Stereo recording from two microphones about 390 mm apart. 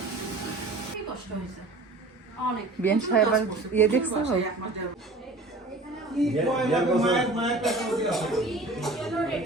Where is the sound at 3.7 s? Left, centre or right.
Centre.